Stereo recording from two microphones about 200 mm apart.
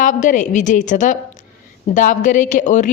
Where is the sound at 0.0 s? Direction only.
40° left (ahead or behind).